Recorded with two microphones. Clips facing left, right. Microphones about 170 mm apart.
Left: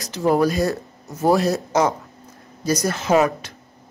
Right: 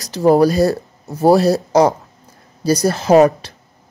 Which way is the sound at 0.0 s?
35° right (ahead or behind).